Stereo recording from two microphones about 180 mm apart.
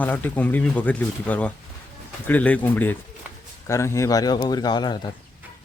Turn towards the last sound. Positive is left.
turn(degrees=25)  # may be behind; listen again after turning